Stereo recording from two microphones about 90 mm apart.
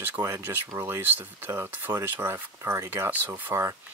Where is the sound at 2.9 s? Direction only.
20° right (ahead or behind).